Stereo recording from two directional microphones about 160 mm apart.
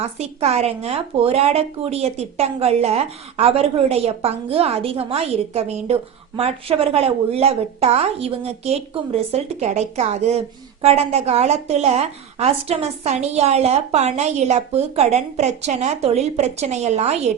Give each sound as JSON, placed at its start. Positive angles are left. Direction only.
{"t": 0.0, "sound": "a woman's voice", "side_deg": -40}